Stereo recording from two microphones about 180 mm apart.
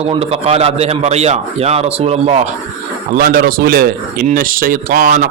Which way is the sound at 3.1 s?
55° right (ahead or behind).